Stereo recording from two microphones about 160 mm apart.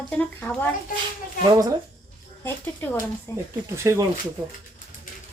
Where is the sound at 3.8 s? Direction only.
20° right (ahead or behind).